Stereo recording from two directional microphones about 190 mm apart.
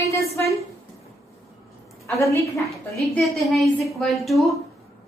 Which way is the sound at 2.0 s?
15° left (ahead or behind).